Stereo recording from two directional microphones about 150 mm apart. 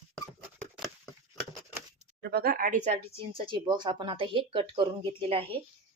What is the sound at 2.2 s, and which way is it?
Speech, 90° right.